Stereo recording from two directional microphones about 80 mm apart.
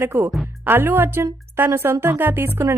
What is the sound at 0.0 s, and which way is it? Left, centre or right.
A woman's voice, right.